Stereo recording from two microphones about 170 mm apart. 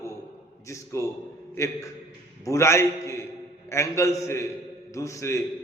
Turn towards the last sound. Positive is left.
turn(degrees=15)  # may be behind; listen again after turning